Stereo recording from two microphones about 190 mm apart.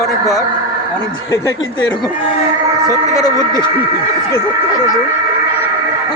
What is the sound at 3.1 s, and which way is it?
Speech, 20° left (ahead or behind).